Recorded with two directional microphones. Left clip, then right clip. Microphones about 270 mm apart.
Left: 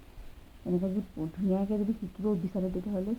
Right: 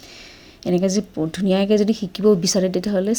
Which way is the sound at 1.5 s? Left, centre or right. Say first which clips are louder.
Right 15 dB; right.